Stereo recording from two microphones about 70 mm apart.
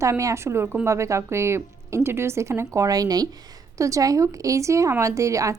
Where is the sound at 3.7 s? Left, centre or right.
Right.